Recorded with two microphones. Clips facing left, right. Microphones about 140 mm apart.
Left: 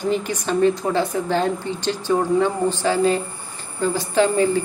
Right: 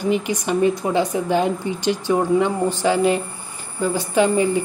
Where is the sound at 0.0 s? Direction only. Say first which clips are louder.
Right 2 dB; 15° right (ahead or behind).